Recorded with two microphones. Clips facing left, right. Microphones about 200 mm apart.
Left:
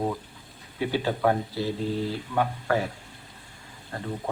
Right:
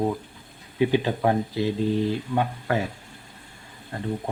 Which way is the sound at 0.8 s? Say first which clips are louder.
Right 3 dB; 20° right (ahead or behind).